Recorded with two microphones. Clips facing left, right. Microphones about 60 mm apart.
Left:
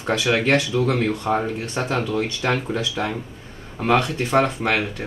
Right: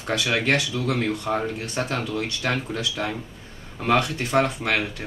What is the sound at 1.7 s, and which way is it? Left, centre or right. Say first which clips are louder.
Speech: left 4 dB; left.